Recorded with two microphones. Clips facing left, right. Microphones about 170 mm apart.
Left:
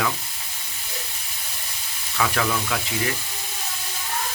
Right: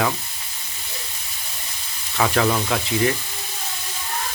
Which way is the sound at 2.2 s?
35° right (ahead or behind).